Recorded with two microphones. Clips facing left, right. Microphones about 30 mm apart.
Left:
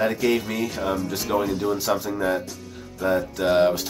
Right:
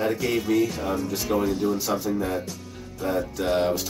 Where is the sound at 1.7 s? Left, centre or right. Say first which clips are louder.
Left 1 dB; left.